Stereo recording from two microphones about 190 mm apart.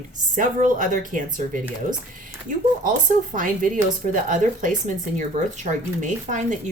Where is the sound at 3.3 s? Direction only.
45° right (ahead or behind).